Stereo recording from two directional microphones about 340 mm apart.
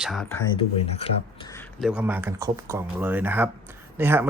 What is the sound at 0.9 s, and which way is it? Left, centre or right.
Speech, centre.